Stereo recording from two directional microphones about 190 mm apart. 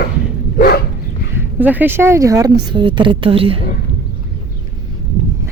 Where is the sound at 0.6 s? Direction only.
55° left (ahead or behind).